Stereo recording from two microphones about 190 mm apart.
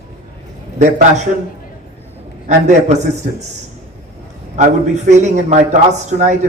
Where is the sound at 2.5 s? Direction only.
35° right (ahead or behind).